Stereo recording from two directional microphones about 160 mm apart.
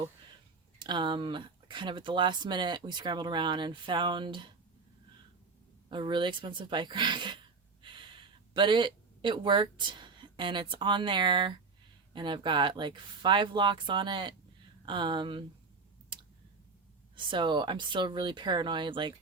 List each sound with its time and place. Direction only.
0.8 s speech: 30° right (ahead or behind)
5.9 s speech: 30° right (ahead or behind)
17.2 s speech: 30° right (ahead or behind)